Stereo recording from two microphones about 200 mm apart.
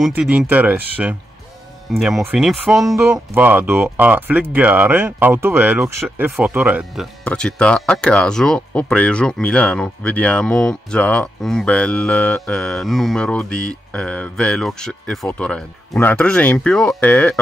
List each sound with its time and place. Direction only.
0.0 s speech: 5° right (ahead or behind)
7.2 s speech: 5° left (ahead or behind)